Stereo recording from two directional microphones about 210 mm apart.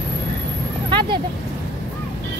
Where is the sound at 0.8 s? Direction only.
20° right (ahead or behind).